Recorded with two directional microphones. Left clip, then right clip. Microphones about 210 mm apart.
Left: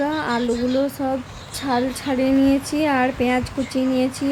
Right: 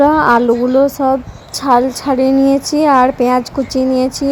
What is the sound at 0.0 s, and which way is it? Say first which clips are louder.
Speech: right 13 dB; 30° right (ahead or behind).